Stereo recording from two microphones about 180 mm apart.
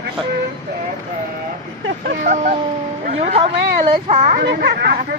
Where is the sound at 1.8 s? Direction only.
60° right (ahead or behind).